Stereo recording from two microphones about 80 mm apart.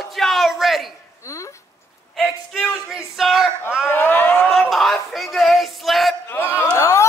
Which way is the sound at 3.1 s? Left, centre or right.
Centre.